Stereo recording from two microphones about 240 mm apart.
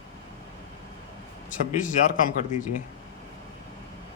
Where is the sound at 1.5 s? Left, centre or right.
Left.